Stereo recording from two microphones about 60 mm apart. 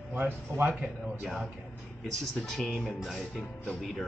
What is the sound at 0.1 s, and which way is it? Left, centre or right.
Speech, right.